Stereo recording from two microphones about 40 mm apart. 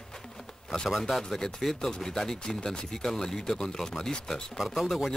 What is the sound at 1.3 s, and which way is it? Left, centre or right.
Speech, centre.